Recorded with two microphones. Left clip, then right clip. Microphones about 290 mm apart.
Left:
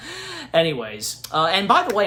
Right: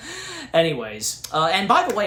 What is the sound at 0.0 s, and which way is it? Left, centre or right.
Speech, centre.